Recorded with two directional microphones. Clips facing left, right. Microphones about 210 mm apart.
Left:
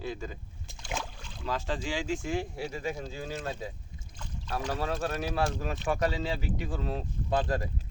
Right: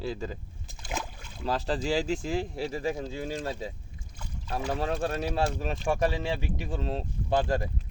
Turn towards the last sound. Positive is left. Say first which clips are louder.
# right 3 dB
turn(degrees=-30)  # may be behind; listen again after turning